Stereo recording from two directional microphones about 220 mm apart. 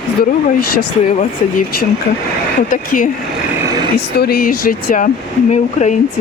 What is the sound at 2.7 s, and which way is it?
Speech, 40° left (ahead or behind).